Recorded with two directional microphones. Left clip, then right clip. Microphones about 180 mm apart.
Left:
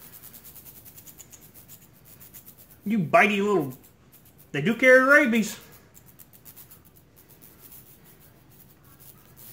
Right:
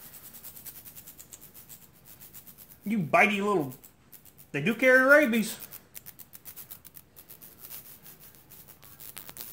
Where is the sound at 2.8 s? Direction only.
25° right (ahead or behind).